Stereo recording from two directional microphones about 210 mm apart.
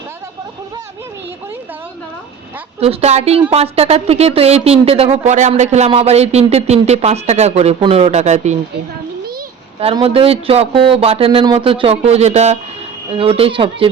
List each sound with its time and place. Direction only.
2.8 s speech: 30° right (ahead or behind)
9.8 s speech: 25° right (ahead or behind)